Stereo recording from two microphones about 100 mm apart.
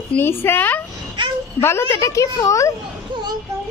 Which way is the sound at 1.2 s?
55° right (ahead or behind).